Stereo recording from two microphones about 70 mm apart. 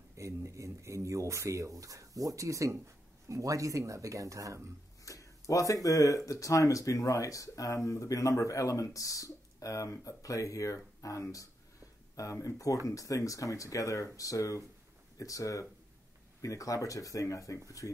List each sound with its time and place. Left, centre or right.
0.2 s speech: right
5.0 s speech: left